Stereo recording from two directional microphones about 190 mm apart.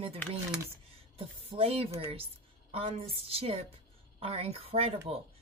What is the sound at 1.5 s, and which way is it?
Speech, 30° right (ahead or behind).